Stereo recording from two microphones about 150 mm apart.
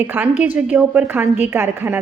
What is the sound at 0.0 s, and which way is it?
A woman's voice, 10° right (ahead or behind).